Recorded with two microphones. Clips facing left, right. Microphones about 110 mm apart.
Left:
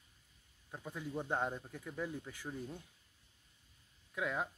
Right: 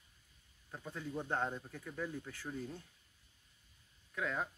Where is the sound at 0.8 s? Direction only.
10° left (ahead or behind).